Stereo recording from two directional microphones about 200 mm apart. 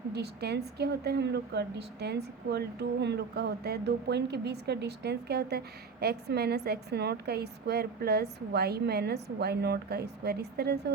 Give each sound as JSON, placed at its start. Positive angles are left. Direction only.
{"t": 0.1, "sound": "a woman's voice", "side_deg": -55}